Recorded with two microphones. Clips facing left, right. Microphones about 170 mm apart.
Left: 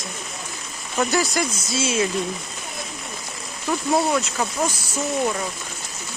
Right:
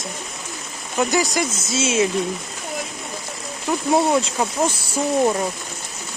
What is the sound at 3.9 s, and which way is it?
Speech, 25° right (ahead or behind).